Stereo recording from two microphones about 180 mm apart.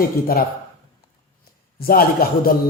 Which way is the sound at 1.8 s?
55° left (ahead or behind).